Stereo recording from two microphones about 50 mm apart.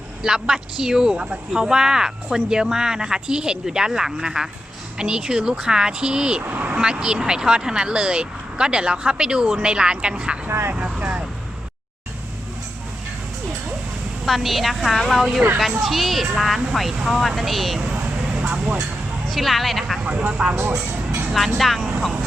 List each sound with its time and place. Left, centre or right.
0.2 s speech: centre
6.4 s speech: right
6.7 s speech: centre
14.3 s speech: centre
18.3 s vehicle: right
19.3 s speech: centre
20.1 s speech: right
20.7 s music: right
21.6 s speech: centre